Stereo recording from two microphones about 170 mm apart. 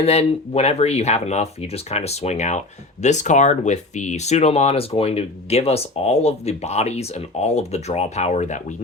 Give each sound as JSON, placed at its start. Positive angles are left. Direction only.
{"t": 0.0, "sound": "speech", "side_deg": 40}